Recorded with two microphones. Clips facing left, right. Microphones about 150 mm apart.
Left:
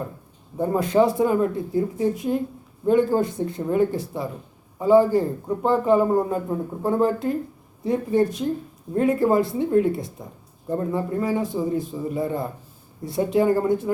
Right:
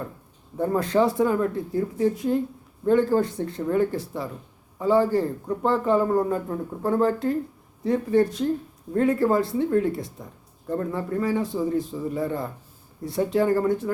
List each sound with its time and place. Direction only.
0.6 s speech: 15° left (ahead or behind)